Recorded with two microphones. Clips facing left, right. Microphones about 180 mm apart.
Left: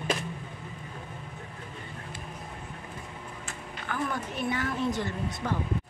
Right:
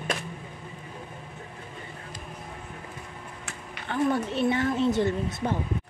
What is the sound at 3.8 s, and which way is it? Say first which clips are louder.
Speech: right 7 dB; 25° right (ahead or behind).